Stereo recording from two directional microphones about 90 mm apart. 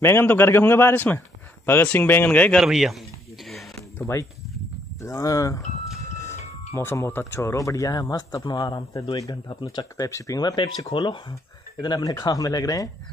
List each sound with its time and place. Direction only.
0.0 s a man's voice: 25° left (ahead or behind)
2.6 s speech: 5° right (ahead or behind)
4.0 s speech: 35° left (ahead or behind); by 10.0 s 55° left (ahead or behind)
10.0 s speech: 40° left (ahead or behind)
10.4 s speech: 65° left (ahead or behind)
11.8 s speech: 50° left (ahead or behind)